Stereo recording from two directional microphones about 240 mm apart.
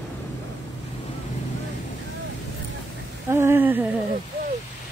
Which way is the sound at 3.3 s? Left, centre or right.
Centre.